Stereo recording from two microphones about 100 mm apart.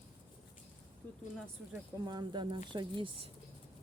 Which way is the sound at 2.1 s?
45° right (ahead or behind).